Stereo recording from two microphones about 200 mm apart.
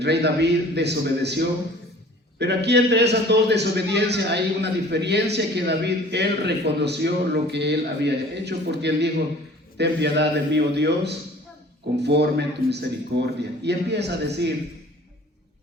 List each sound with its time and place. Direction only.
0.0 s a man's voice: 55° right (ahead or behind)